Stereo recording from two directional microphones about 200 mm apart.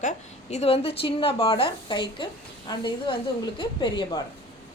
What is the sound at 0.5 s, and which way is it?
A woman's voice, 30° left (ahead or behind).